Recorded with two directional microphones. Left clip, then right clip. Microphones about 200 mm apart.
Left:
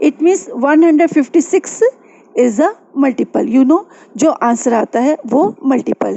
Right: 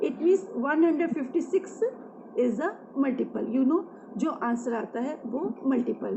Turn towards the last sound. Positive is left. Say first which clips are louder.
# left 14 dB
turn(degrees=55)  # may be behind; listen again after turning